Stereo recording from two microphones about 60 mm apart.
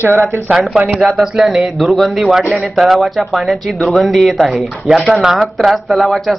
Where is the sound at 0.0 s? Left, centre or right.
Right.